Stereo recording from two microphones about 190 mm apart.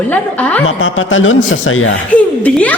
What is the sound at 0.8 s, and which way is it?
A man's voice, 90° left.